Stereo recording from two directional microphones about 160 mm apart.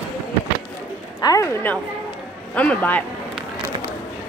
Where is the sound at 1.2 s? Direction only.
20° left (ahead or behind).